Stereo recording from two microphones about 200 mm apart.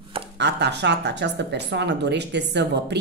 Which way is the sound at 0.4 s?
55° right (ahead or behind).